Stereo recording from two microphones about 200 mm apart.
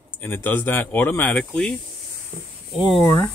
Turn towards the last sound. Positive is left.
turn(degrees=15)  # may be behind; listen again after turning